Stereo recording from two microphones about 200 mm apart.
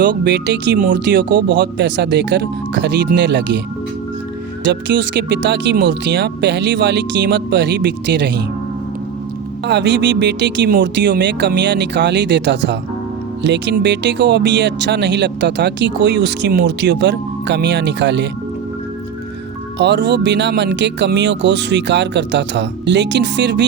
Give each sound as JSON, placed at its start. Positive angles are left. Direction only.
{"t": 0.0, "sound": "speech", "side_deg": -60}
{"t": 4.6, "sound": "speech", "side_deg": -60}
{"t": 9.6, "sound": "speech", "side_deg": -60}
{"t": 19.8, "sound": "speech", "side_deg": -60}